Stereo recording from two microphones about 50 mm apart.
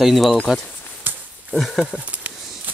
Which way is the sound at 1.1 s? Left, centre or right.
Right.